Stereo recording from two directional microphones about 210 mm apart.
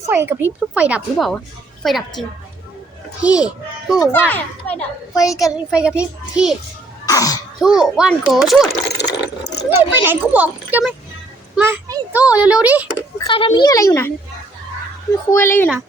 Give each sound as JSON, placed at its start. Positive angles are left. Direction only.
{"t": 0.0, "sound": "a child's voice", "side_deg": -10}
{"t": 4.0, "sound": "a child's voice", "side_deg": 10}
{"t": 7.0, "sound": "cough", "side_deg": 15}
{"t": 7.6, "sound": "a child's voice", "side_deg": -5}
{"t": 9.0, "sound": "water", "side_deg": 55}
{"t": 9.6, "sound": "a child's voice", "side_deg": -10}
{"t": 13.2, "sound": "a child's voice", "side_deg": 25}
{"t": 15.3, "sound": "a child's voice", "side_deg": 10}